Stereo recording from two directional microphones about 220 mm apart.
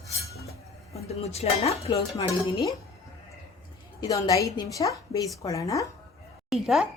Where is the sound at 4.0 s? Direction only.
15° left (ahead or behind).